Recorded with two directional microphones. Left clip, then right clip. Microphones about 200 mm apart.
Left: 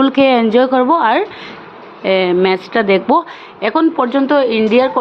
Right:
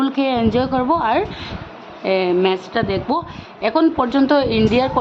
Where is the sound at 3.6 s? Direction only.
10° left (ahead or behind).